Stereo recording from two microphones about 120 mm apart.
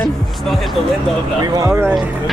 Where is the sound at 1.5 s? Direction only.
30° right (ahead or behind).